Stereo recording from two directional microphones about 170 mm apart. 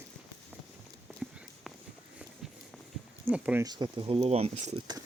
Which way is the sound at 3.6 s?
25° right (ahead or behind).